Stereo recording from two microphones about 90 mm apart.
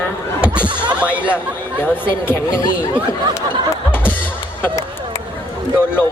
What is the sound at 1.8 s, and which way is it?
Speech, 20° left (ahead or behind).